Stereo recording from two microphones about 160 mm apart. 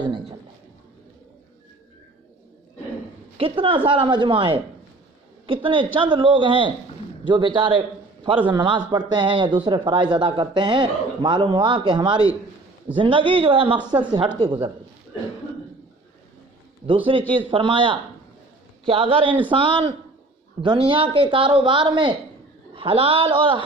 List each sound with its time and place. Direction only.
0.0 s speech: 30° right (ahead or behind)
3.3 s a man's voice: 35° right (ahead or behind)
16.8 s speech: 30° right (ahead or behind)